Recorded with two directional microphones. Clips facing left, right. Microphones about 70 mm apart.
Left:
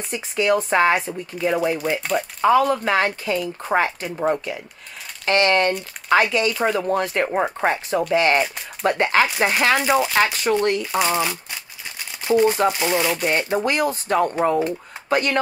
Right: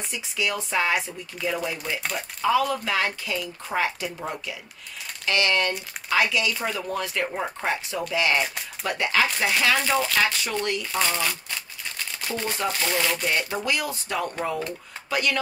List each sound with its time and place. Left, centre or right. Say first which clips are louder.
0.1 s speech: left 9 dB; left
9.8 s speech: left 5 dB; centre
10.1 s speech: left 5 dB; left
10.8 s shuffling cards: left 5 dB; left
12.6 s speech: left 6 dB; centre
13.2 s speech: left 6 dB; left